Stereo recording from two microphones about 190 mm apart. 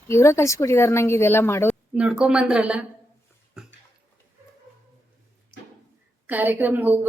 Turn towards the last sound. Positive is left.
turn(degrees=-10)  # may be behind; listen again after turning